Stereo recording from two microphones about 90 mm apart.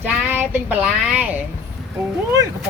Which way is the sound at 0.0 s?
20° right (ahead or behind).